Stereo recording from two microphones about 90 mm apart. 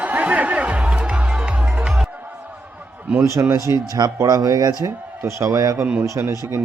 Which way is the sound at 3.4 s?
30° right (ahead or behind).